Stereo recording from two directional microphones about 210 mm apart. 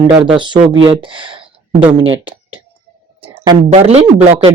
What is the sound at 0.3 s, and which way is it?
Speech, 20° right (ahead or behind).